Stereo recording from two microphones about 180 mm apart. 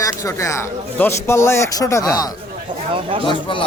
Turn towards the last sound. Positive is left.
turn(degrees=30)  # may be behind; listen again after turning